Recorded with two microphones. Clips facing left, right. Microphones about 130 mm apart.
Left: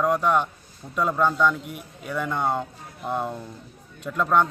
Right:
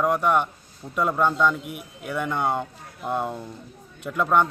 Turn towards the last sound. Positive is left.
turn(degrees=-10)  # may be behind; listen again after turning